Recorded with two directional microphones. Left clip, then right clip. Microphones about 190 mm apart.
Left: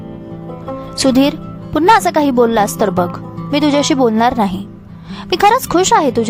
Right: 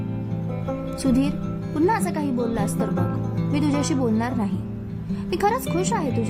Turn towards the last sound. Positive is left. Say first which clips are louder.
# left 13 dB
turn(degrees=40)  # may be behind; listen again after turning